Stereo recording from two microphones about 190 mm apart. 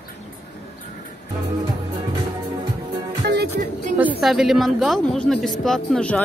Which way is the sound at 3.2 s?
60° right (ahead or behind).